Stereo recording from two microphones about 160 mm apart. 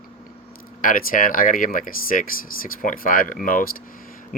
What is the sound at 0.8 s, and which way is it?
Speech, 60° left (ahead or behind).